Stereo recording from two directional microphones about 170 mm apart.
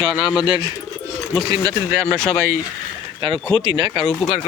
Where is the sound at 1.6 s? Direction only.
15° right (ahead or behind).